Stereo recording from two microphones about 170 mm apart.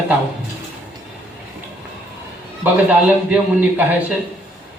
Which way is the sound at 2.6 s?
5° right (ahead or behind).